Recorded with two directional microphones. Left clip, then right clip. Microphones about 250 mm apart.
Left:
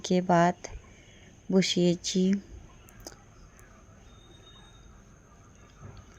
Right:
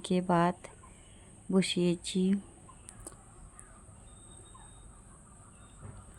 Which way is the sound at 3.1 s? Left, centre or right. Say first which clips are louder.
Left 6 dB; centre.